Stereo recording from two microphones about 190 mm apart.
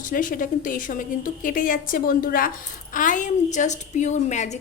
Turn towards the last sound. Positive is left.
turn(degrees=40)  # may be behind; listen again after turning